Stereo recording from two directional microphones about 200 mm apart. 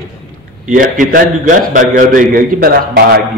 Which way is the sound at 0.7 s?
45° right (ahead or behind).